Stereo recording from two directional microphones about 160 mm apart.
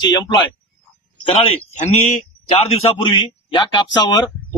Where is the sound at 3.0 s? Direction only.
30° left (ahead or behind).